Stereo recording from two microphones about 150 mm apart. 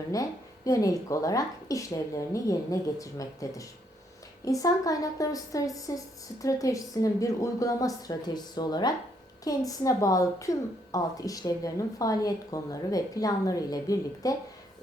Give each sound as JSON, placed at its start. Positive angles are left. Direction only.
{"t": 0.1, "sound": "speech", "side_deg": 20}